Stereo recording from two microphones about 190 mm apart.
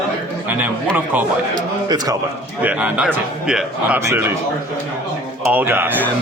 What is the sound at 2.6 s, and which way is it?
A man's voice, 10° right (ahead or behind).